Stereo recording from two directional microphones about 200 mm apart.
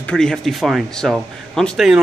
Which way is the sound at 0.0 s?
5° left (ahead or behind).